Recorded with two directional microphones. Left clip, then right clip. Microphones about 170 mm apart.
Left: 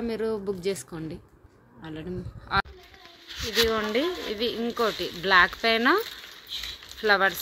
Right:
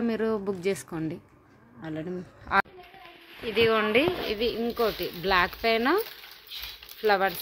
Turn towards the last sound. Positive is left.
turn(degrees=0)  # may be behind; listen again after turning